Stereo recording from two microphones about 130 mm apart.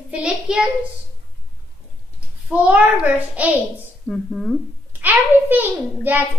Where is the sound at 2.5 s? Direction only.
10° right (ahead or behind).